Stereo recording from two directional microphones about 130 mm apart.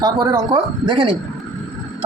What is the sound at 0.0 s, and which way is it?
Speech, 30° right (ahead or behind).